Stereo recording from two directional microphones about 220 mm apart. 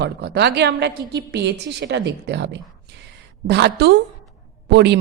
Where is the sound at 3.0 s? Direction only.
50° right (ahead or behind).